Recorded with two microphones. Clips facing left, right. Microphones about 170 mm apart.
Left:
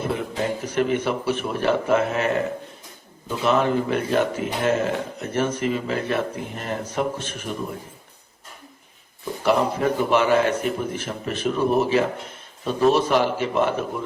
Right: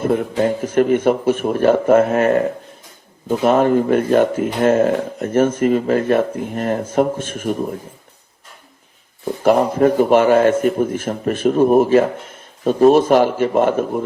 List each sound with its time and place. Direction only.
0.0 s a man's voice: 50° right (ahead or behind)
9.2 s a man's voice: 50° right (ahead or behind)